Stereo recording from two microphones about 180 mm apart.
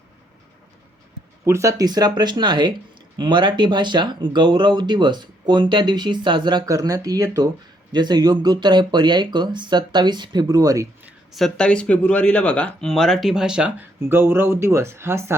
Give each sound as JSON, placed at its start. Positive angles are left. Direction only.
{"t": 1.5, "sound": "speech", "side_deg": -15}
{"t": 11.3, "sound": "speech", "side_deg": 0}